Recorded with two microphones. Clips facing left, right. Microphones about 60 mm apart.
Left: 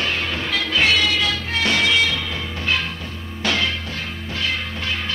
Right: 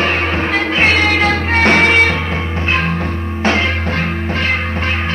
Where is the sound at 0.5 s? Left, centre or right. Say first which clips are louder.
Right 4 dB; right.